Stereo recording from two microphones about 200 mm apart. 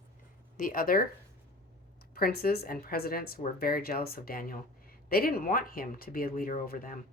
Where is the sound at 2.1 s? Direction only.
50° left (ahead or behind).